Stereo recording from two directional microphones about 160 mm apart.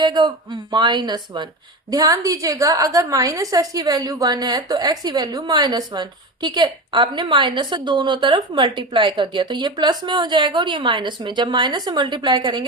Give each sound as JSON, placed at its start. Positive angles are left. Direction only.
{"t": 0.0, "sound": "a woman's voice", "side_deg": -25}